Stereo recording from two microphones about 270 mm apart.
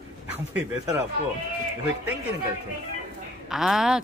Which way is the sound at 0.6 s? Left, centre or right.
Centre.